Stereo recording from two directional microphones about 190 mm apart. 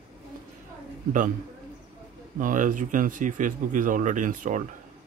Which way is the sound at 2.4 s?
45° right (ahead or behind).